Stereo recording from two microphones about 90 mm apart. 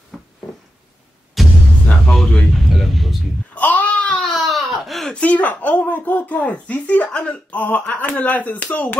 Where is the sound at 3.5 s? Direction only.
15° left (ahead or behind); by 5.1 s centre (ahead or behind).